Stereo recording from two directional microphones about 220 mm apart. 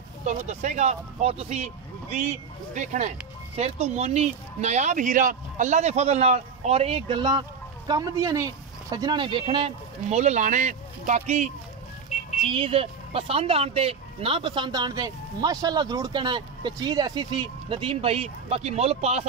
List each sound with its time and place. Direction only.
0.2 s speech: 30° right (ahead or behind)
12.1 s music: 35° left (ahead or behind)
12.4 s speech: 25° right (ahead or behind)